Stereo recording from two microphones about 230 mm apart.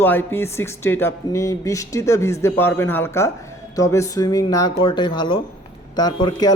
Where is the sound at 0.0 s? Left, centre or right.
Centre.